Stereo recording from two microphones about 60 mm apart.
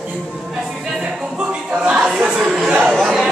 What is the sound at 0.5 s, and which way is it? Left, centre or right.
Music, centre.